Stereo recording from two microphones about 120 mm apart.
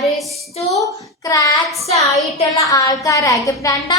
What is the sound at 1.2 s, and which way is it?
Child singing, 30° left (ahead or behind).